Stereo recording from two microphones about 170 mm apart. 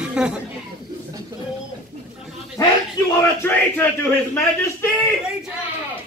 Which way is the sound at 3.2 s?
15° left (ahead or behind).